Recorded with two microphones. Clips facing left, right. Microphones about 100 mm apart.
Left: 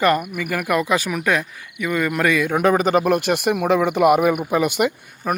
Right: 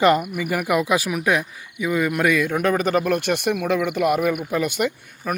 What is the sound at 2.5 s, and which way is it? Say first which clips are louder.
Speech: left 3 dB; 10° left (ahead or behind).